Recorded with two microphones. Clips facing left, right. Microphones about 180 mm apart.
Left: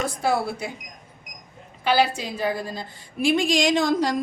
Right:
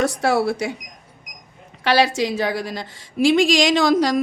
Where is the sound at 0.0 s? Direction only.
75° right (ahead or behind).